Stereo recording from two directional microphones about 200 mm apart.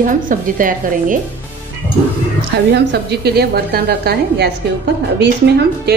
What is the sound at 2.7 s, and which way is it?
A woman's voice, 55° right (ahead or behind).